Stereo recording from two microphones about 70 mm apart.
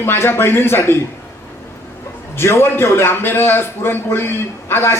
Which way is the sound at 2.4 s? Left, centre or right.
Left.